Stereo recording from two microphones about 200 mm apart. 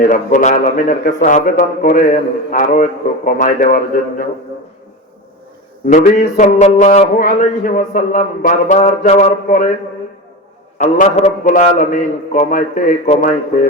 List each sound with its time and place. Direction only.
0.1 s a man's voice: 35° left (ahead or behind)
5.9 s a man's voice: 40° left (ahead or behind)
10.8 s a man's voice: 35° left (ahead or behind)